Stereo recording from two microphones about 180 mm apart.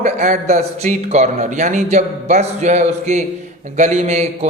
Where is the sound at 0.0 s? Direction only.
40° right (ahead or behind).